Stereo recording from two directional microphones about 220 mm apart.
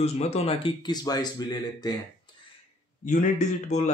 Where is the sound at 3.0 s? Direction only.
35° left (ahead or behind).